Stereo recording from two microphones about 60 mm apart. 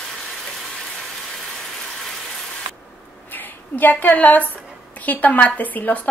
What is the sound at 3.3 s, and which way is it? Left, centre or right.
A woman's voice, left.